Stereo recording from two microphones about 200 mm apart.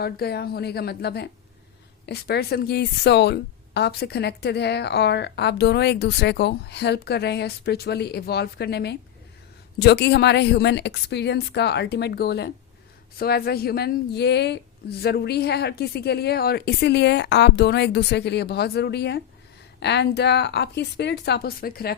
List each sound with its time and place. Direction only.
0.0 s a woman's voice: 50° left (ahead or behind)